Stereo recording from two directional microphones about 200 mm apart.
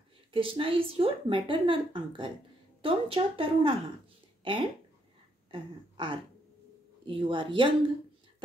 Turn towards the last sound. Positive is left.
turn(degrees=-25)  # may be behind; listen again after turning